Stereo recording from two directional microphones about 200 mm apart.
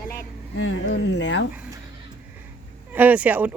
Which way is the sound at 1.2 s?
65° left (ahead or behind).